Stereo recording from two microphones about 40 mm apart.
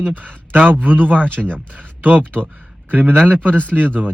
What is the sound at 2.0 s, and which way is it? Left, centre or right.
Speech, right.